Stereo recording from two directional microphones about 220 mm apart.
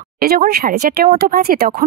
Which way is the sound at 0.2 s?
45° right (ahead or behind).